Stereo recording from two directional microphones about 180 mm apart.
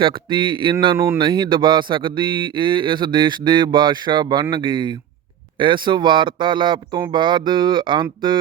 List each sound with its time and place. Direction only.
0.0 s speech: 25° right (ahead or behind)
0.9 s speech: 15° right (ahead or behind)
1.2 s speech: 25° right (ahead or behind)